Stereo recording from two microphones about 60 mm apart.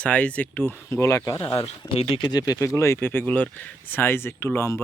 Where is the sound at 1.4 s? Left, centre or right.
Left.